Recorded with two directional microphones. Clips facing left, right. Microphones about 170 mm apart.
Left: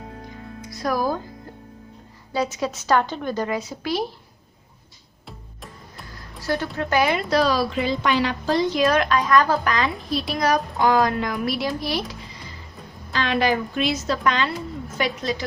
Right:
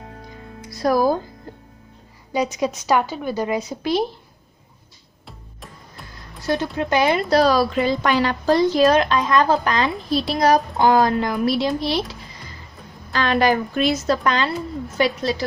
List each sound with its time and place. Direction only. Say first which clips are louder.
0.8 s a woman's voice: right 6 dB; 30° right (ahead or behind)
2.3 s a woman's voice: right 3 dB; 15° right (ahead or behind)
6.4 s speech: right 3 dB; 20° right (ahead or behind)
7.0 s a woman's voice: right 4 dB; 35° right (ahead or behind)
13.1 s a woman's voice: right 3 dB; 45° right (ahead or behind)